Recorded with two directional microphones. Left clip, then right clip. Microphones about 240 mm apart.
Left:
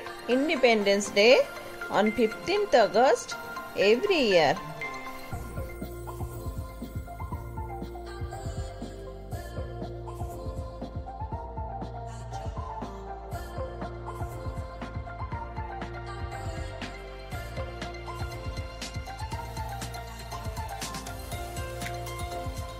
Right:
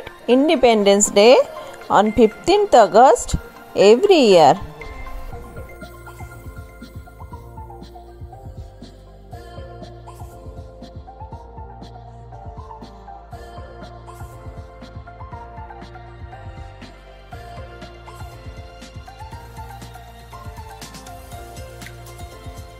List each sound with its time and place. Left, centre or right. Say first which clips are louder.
0.3 s speech: right 9 dB; right